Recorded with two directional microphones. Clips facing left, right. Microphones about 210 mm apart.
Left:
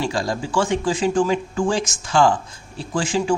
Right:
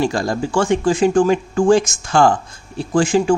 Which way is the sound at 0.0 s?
55° right (ahead or behind).